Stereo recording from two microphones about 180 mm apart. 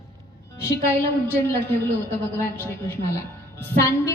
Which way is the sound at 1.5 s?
10° left (ahead or behind).